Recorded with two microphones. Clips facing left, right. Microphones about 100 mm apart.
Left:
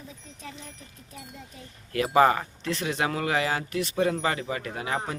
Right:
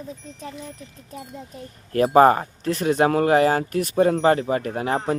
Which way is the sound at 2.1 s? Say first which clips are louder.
Right 5 dB; 40° right (ahead or behind).